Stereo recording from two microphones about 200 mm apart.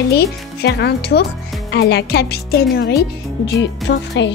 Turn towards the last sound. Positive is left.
turn(degrees=60)  # may be behind; listen again after turning